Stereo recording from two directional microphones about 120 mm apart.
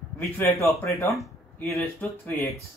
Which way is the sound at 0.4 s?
25° left (ahead or behind).